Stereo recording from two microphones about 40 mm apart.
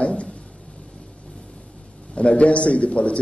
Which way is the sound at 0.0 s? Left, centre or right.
Left.